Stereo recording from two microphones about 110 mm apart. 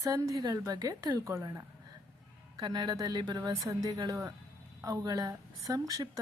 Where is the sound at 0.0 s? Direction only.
30° right (ahead or behind).